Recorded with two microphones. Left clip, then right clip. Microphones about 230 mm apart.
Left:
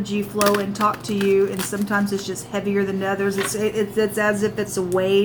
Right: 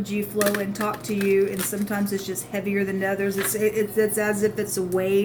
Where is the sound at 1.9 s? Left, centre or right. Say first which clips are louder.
Left 7 dB; centre.